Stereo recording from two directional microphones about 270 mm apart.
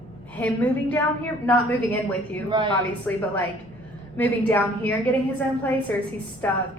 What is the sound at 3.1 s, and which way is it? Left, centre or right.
A woman's voice, centre.